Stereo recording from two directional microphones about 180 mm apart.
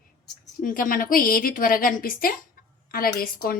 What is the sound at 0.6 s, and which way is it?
Speech, 50° left (ahead or behind).